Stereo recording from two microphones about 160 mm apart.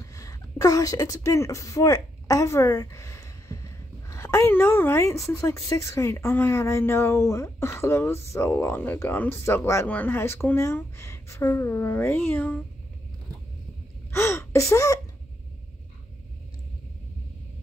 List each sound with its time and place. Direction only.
0.0 s a woman's voice: 20° left (ahead or behind)
14.1 s speech: 15° left (ahead or behind)